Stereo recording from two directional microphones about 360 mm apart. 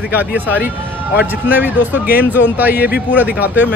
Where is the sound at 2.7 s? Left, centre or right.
Left.